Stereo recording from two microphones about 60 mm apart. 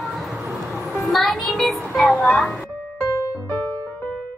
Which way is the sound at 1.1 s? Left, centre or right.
Centre.